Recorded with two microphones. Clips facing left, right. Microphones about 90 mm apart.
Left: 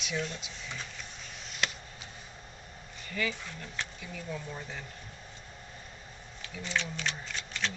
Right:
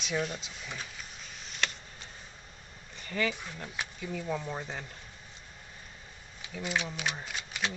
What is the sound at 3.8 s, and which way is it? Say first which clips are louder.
Insect: right 1 dB; 10° right (ahead or behind).